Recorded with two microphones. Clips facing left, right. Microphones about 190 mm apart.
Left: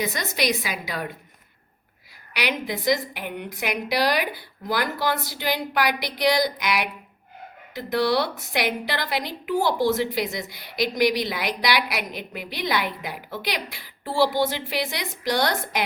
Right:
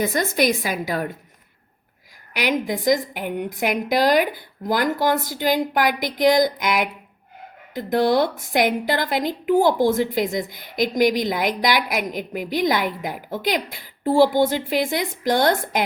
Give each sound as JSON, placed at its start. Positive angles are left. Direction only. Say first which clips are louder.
{"t": 0.0, "sound": "a woman's voice", "louder": "right 6 dB", "side_deg": -50}
{"t": 2.3, "sound": "a woman's voice", "louder": "right 5 dB", "side_deg": -45}